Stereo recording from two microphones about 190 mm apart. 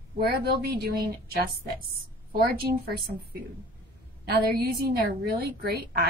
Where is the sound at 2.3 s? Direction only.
55° right (ahead or behind).